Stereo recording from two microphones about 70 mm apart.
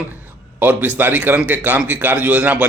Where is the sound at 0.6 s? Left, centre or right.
Right.